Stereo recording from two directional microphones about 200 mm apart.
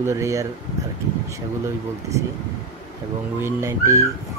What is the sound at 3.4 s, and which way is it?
Speech, 15° right (ahead or behind).